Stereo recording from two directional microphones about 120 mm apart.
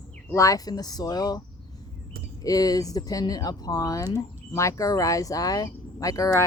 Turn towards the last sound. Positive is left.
turn(degrees=30)  # may be behind; listen again after turning